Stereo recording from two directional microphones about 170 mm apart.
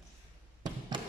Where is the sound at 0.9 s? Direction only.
25° right (ahead or behind).